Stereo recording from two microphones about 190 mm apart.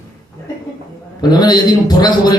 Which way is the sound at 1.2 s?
20° left (ahead or behind).